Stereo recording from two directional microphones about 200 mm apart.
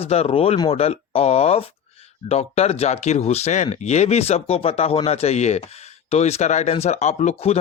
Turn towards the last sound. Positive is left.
turn(degrees=35)  # may be behind; listen again after turning